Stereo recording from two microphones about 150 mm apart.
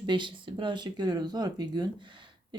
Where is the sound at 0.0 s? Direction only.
30° right (ahead or behind).